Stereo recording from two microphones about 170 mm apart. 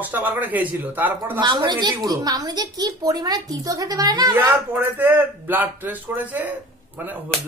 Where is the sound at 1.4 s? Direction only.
25° right (ahead or behind).